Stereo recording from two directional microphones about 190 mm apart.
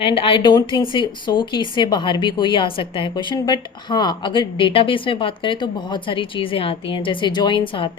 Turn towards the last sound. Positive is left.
turn(degrees=25)  # may be behind; listen again after turning